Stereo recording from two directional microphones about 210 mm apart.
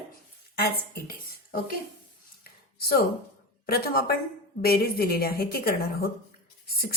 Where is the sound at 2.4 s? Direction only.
45° left (ahead or behind).